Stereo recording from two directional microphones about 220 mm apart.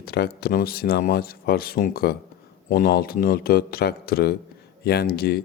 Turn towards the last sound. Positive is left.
turn(degrees=45)  # may be behind; listen again after turning